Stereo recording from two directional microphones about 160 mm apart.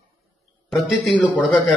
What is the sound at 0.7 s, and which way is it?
A man's voice, centre (ahead or behind).